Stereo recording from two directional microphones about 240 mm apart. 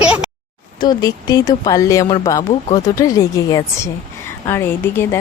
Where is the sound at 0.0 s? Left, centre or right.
Centre.